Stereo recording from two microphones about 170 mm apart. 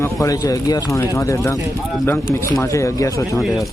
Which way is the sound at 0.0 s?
20° left (ahead or behind).